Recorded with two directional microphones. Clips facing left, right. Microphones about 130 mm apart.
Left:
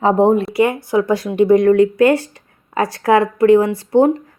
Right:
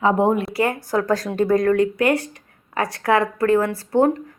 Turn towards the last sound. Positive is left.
turn(degrees=25)  # may be behind; listen again after turning